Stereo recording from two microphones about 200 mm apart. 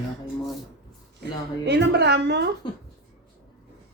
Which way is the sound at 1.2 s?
60° right (ahead or behind).